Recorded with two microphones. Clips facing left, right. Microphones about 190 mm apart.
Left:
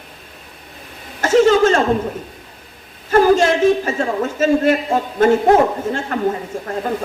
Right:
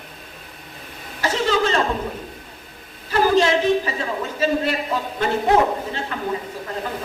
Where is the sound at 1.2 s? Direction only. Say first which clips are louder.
Left 9 dB; 45° left (ahead or behind).